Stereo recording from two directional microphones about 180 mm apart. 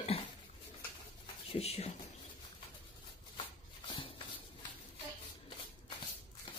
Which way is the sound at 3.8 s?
25° left (ahead or behind).